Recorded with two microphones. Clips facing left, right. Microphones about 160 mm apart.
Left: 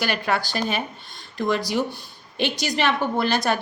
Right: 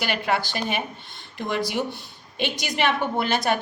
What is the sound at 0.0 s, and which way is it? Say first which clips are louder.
Speech: left 1 dB; 45° left (ahead or behind).